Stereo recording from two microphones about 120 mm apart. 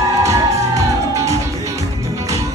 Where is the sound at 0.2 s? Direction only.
25° right (ahead or behind).